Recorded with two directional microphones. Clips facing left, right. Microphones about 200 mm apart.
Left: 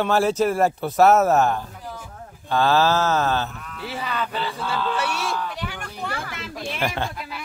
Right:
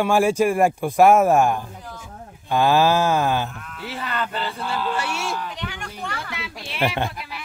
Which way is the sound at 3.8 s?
Centre (ahead or behind).